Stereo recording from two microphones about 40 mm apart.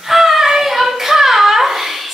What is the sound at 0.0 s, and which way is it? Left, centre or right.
Hands, centre.